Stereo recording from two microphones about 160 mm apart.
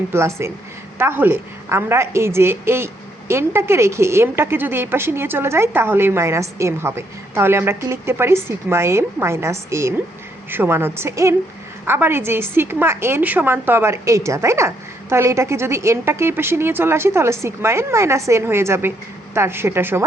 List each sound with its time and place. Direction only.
0.1 s a woman's voice: 15° right (ahead or behind)